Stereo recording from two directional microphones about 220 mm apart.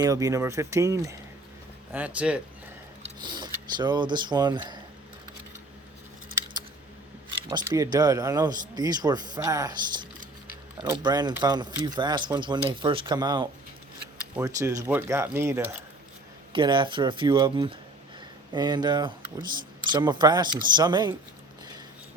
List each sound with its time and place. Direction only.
0.0 s speech: 15° right (ahead or behind)
3.0 s speech: 20° right (ahead or behind)
7.5 s speech: 20° right (ahead or behind)
16.5 s speech: 20° right (ahead or behind)